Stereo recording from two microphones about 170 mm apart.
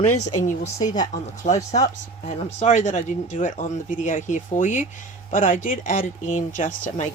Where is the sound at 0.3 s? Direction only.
45° left (ahead or behind).